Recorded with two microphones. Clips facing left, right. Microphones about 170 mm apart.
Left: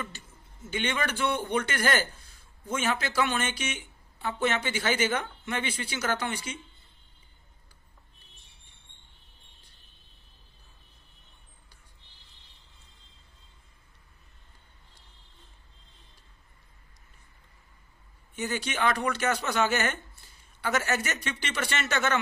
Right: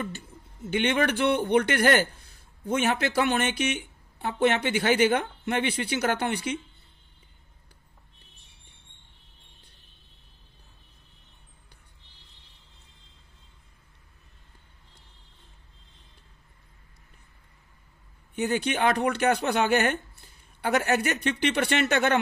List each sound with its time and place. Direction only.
0.7 s speech: 60° right (ahead or behind)
18.3 s speech: 60° right (ahead or behind)